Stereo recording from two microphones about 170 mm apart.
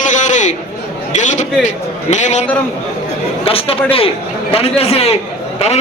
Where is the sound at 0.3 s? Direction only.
45° left (ahead or behind).